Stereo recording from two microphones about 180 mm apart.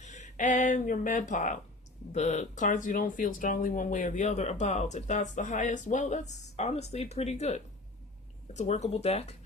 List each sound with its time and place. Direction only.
0.0 s speech: 40° left (ahead or behind)